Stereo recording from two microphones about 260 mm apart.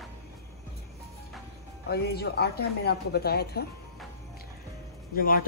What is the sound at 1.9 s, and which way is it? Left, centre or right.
Speech, left.